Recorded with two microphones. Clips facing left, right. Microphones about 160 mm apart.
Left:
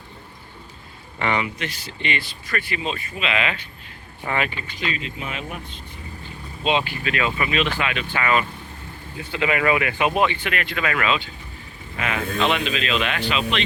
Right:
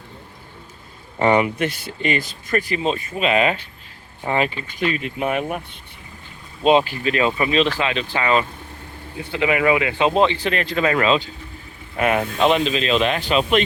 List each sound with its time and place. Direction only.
1.2 s speech: 40° right (ahead or behind)
4.7 s speech: 55° right (ahead or behind)
6.7 s speech: 40° right (ahead or behind)
11.9 s speech: 50° right (ahead or behind)
12.4 s speech: 35° right (ahead or behind)